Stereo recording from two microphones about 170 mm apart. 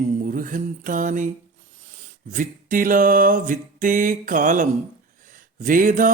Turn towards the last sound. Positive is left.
turn(degrees=-50)  # may be behind; listen again after turning